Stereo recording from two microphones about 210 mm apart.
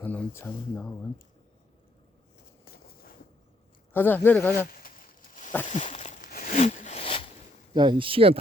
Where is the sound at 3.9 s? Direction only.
10° left (ahead or behind).